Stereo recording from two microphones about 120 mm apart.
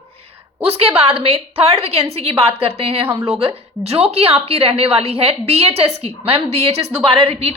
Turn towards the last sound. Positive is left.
turn(degrees=-55)  # may be behind; listen again after turning